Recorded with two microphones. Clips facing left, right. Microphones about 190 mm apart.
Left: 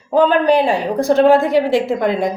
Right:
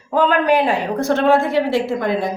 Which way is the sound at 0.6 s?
15° left (ahead or behind).